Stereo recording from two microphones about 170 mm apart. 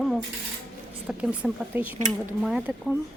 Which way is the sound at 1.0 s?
5° right (ahead or behind).